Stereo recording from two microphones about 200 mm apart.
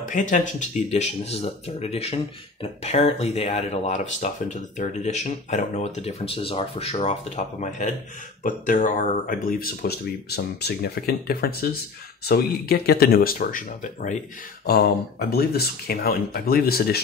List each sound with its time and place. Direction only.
0.0 s speech: 40° left (ahead or behind)
14.7 s speech: 50° left (ahead or behind)